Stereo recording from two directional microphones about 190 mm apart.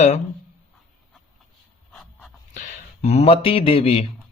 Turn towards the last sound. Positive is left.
turn(degrees=30)  # may be behind; listen again after turning